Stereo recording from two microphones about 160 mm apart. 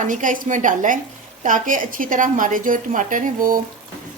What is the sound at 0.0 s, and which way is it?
A woman's voice, 55° right (ahead or behind).